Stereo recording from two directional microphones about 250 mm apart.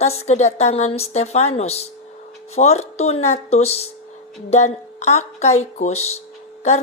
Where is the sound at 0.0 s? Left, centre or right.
Left.